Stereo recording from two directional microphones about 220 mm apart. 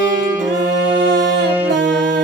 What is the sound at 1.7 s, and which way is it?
Music, 55° right (ahead or behind).